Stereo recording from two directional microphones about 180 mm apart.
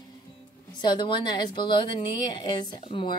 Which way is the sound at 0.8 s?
25° left (ahead or behind).